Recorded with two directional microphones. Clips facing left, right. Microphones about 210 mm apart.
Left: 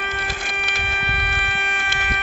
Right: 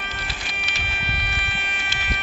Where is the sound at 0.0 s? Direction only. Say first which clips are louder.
Left 6 dB; 55° left (ahead or behind).